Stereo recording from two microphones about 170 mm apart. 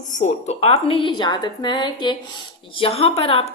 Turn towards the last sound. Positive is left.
turn(degrees=35)  # may be behind; listen again after turning